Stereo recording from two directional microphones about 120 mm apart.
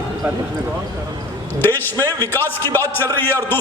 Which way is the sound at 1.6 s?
20° left (ahead or behind).